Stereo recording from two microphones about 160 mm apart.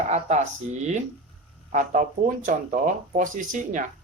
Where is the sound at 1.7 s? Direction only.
55° right (ahead or behind).